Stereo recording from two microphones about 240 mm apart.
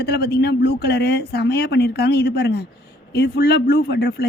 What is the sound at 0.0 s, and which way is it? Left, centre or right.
Speech, left.